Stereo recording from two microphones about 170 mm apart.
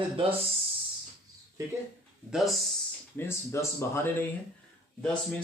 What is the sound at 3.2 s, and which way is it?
Speech, 15° left (ahead or behind).